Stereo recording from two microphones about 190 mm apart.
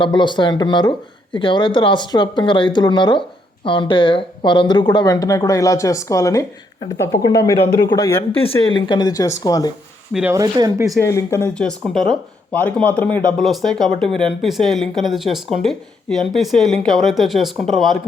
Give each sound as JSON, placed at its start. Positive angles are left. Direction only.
{"t": 0.0, "sound": "speech", "side_deg": 25}
{"t": 8.4, "sound": "speech", "side_deg": 30}
{"t": 10.1, "sound": "speech", "side_deg": -5}
{"t": 10.3, "sound": "speech", "side_deg": -20}
{"t": 11.0, "sound": "speech", "side_deg": 15}